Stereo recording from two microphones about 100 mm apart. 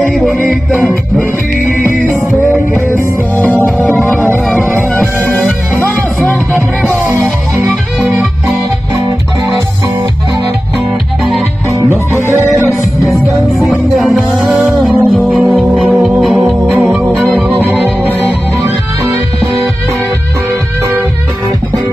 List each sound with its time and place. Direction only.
0.0 s music: centre (ahead or behind)
3.7 s music: 20° left (ahead or behind)
5.2 s music: 20° left (ahead or behind)
6.5 s music: 20° right (ahead or behind)
12.3 s music: 20° right (ahead or behind)
13.0 s music: centre (ahead or behind)
14.9 s music: 15° right (ahead or behind)
15.3 s music: centre (ahead or behind)
16.3 s music: 20° right (ahead or behind)